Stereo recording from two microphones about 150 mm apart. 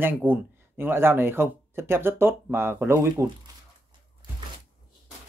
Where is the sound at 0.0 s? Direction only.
10° right (ahead or behind).